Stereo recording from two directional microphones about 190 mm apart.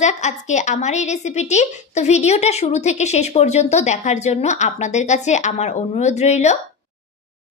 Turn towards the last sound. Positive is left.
turn(degrees=35)  # may be behind; listen again after turning